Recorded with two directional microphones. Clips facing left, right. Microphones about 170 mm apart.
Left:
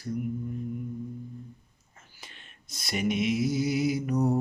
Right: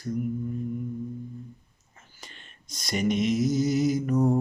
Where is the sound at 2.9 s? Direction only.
5° left (ahead or behind).